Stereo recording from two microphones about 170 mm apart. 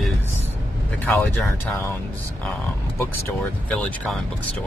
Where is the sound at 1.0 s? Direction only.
10° left (ahead or behind).